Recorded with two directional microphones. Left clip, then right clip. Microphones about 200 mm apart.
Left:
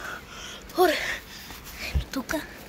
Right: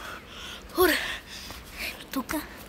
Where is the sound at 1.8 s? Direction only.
20° right (ahead or behind).